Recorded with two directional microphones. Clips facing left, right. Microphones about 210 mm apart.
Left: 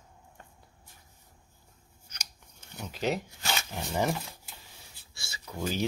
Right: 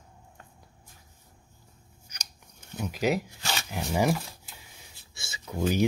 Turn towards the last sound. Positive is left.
turn(degrees=-20)  # may be behind; listen again after turning